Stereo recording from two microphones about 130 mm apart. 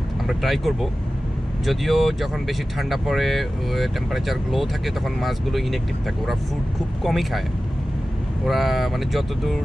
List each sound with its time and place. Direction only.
0.3 s speech: centre (ahead or behind)
7.0 s speech: centre (ahead or behind)
8.5 s speech: centre (ahead or behind)